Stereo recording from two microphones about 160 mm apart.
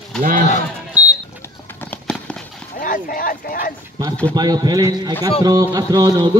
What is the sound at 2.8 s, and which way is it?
Speech, 60° left (ahead or behind).